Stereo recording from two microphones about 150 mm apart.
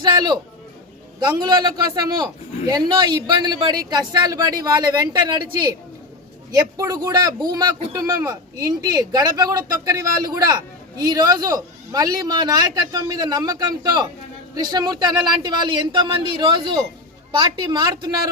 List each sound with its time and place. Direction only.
0.0 s a man's voice: 30° right (ahead or behind)